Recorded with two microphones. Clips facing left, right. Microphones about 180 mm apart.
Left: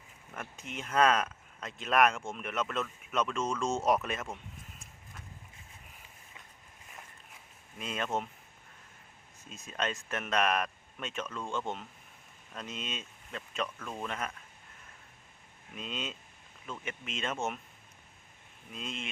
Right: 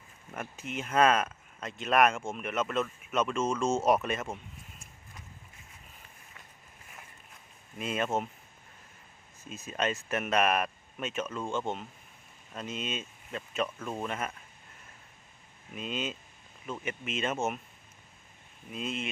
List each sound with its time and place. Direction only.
0.3 s speech: 5° right (ahead or behind)
7.8 s speech: 5° right (ahead or behind)
9.4 s speech: 5° right (ahead or behind)
13.7 s speech: 20° right (ahead or behind)
14.1 s speech: 5° right (ahead or behind)
15.7 s speech: 5° right (ahead or behind)
18.7 s speech: 5° right (ahead or behind)